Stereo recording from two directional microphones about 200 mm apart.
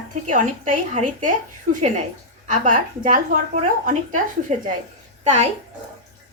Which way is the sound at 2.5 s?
40° right (ahead or behind).